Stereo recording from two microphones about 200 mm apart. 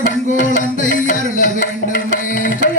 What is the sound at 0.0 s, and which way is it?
Music, 40° left (ahead or behind).